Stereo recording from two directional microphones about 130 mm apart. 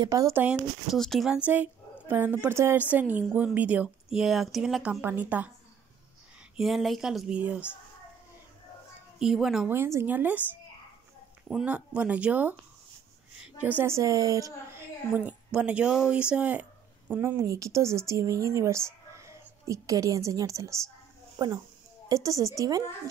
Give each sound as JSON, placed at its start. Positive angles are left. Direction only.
{"t": 0.0, "sound": "speech", "side_deg": -25}
{"t": 0.4, "sound": "speech", "side_deg": -10}
{"t": 0.9, "sound": "speech", "side_deg": 5}
{"t": 5.0, "sound": "speech", "side_deg": -15}
{"t": 6.5, "sound": "speech", "side_deg": 0}
{"t": 9.2, "sound": "speech", "side_deg": -5}
{"t": 9.7, "sound": "speech", "side_deg": -20}
{"t": 11.4, "sound": "speech", "side_deg": -5}
{"t": 13.7, "sound": "speech", "side_deg": -20}